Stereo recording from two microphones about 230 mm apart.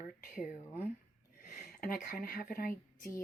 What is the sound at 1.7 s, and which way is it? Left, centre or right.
Speech, left.